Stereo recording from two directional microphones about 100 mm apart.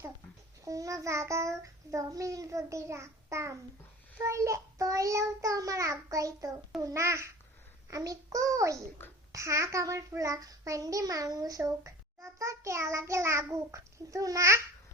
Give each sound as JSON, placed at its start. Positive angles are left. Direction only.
{"t": 0.6, "sound": "a child's voice", "side_deg": -35}